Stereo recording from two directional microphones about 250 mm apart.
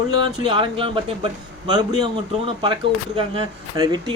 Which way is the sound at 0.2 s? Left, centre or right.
Centre.